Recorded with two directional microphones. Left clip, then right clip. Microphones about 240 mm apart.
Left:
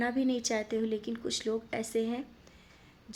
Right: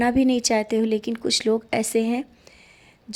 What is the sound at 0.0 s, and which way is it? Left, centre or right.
Speech, right.